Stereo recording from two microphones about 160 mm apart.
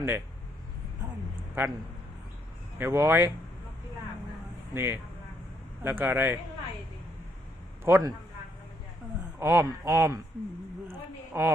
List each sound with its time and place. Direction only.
1.6 s speech: 10° right (ahead or behind)
2.7 s speech: 15° right (ahead or behind)
4.7 s speech: 15° right (ahead or behind)
7.9 s speech: 15° right (ahead or behind)
9.4 s speech: 15° right (ahead or behind)
11.3 s speech: 15° right (ahead or behind)